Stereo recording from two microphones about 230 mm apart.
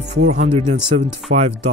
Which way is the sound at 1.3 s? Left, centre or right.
Right.